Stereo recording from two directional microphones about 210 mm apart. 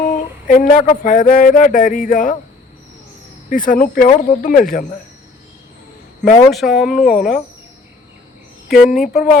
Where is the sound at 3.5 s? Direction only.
40° left (ahead or behind).